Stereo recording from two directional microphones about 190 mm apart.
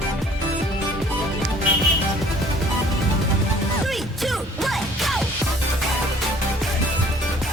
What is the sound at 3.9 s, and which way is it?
Music, centre (ahead or behind).